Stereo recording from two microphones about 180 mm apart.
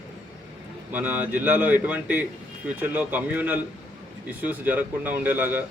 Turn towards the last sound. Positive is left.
turn(degrees=-10)  # may be behind; listen again after turning